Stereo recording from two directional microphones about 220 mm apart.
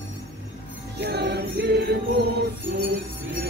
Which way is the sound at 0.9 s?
50° right (ahead or behind).